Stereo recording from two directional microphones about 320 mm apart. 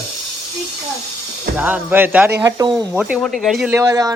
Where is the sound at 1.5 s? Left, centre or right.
Centre.